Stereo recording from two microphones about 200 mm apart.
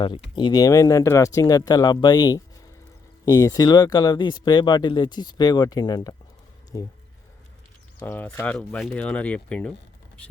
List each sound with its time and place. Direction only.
0.0 s speech: 25° left (ahead or behind)
7.9 s speech: 10° left (ahead or behind)